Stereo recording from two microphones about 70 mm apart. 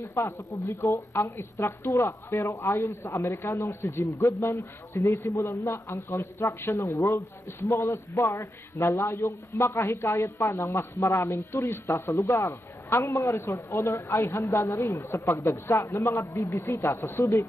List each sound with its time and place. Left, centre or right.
0.1 s a man's voice: left
7.0 s speech: left
7.6 s a man's voice: left